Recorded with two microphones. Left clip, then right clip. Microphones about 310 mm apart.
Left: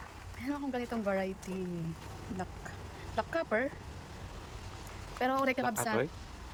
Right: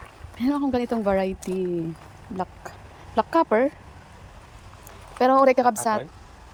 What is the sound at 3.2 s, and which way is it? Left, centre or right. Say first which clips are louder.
Speech: right 12 dB; centre.